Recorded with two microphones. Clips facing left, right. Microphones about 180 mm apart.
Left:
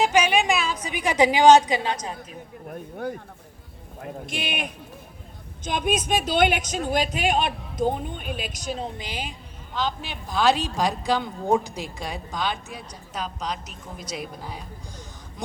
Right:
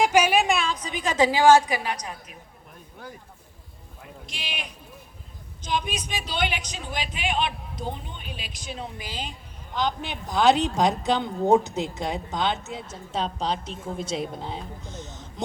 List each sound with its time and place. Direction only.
0.0 s a woman's voice: 10° right (ahead or behind); by 2.1 s 25° left (ahead or behind)
2.6 s speech: 55° left (ahead or behind); by 8.9 s 40° left (ahead or behind)
9.0 s a woman's voice: 20° left (ahead or behind)
9.7 s speech: 20° right (ahead or behind)